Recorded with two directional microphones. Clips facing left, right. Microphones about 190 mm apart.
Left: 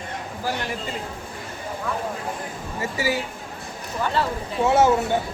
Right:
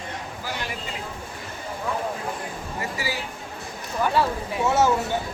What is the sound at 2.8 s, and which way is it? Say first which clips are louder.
Speech: left 7 dB; 25° left (ahead or behind).